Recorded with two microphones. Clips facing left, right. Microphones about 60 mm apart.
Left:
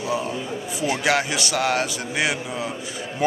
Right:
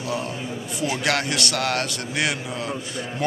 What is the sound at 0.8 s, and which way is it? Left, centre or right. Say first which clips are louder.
Speech: left 2 dB; centre.